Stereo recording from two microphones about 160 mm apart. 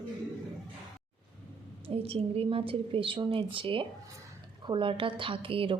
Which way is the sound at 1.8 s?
35° right (ahead or behind).